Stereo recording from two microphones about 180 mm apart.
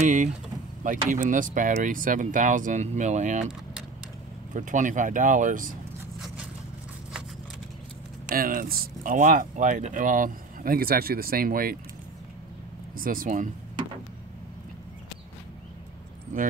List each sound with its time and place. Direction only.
0.0 s speech: 45° right (ahead or behind)
4.6 s speech: 45° right (ahead or behind)
8.4 s speech: 55° right (ahead or behind)
12.9 s speech: 50° right (ahead or behind)
16.3 s speech: 45° right (ahead or behind)